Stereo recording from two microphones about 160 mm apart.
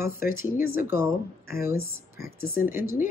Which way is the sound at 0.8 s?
15° right (ahead or behind).